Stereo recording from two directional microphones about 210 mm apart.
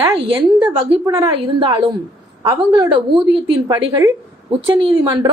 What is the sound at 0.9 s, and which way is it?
Speech, 15° right (ahead or behind).